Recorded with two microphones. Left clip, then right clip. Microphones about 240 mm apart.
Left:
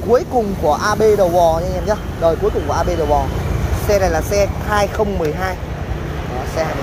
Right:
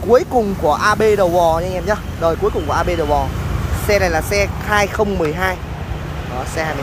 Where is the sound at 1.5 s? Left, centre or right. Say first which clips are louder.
Even; right.